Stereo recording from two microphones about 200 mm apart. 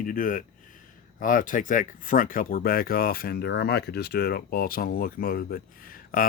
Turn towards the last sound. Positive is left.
turn(degrees=45)  # may be behind; listen again after turning